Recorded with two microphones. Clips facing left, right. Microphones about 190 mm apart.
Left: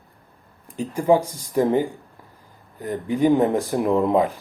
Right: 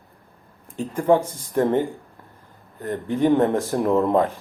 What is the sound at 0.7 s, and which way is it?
Speech, centre (ahead or behind).